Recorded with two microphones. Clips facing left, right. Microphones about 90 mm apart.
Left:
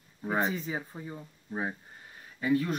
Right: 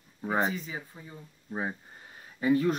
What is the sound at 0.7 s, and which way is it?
Speech, 25° left (ahead or behind).